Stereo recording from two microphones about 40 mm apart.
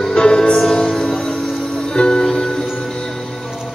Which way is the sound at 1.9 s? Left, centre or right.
Left.